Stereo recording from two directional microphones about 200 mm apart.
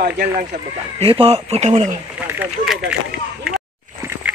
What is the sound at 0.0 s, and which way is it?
Speech, 45° right (ahead or behind).